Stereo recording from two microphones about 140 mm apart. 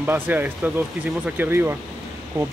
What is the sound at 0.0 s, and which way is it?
Speech, 15° right (ahead or behind).